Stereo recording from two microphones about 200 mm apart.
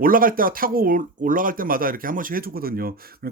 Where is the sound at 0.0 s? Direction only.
45° right (ahead or behind).